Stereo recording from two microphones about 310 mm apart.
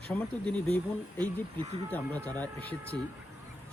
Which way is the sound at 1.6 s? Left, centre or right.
Right.